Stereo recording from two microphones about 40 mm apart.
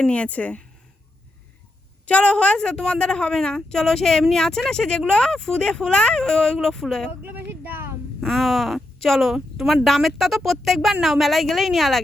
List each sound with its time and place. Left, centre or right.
0.1 s speech: left
2.0 s a woman's voice: left; by 6.8 s centre
7.3 s a sound: right
8.2 s speech: centre
9.3 s speech: centre